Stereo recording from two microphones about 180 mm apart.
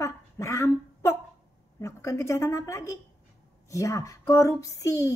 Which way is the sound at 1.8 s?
15° left (ahead or behind).